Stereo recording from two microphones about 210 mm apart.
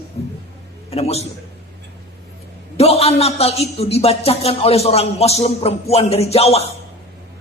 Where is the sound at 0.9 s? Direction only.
30° left (ahead or behind).